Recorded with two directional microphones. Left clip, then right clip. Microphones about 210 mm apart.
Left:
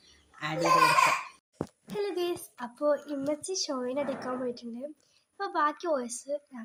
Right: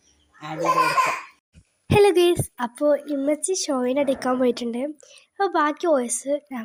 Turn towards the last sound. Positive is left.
turn(degrees=-40)  # may be behind; listen again after turning